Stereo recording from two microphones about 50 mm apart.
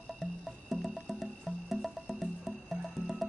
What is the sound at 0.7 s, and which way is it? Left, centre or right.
Music, centre.